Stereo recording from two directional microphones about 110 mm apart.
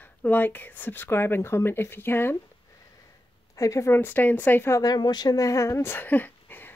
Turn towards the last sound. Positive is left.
turn(degrees=20)  # may be behind; listen again after turning